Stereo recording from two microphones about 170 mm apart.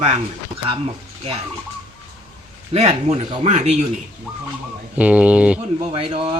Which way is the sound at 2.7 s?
40° right (ahead or behind).